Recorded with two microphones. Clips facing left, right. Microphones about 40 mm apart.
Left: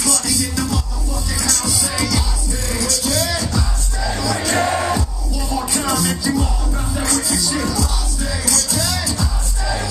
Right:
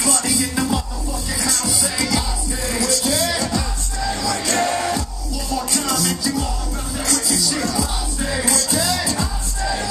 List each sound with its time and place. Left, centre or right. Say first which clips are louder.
0.0 s music: right 1 dB; centre
1.4 s music: even; centre
8.2 s music: right 3 dB; right
8.5 s music: right 1 dB; centre